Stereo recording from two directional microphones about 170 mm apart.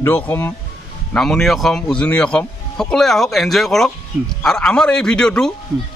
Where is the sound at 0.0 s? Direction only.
10° left (ahead or behind).